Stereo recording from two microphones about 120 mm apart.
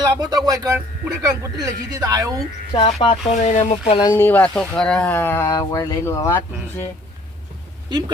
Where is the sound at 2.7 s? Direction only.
45° left (ahead or behind).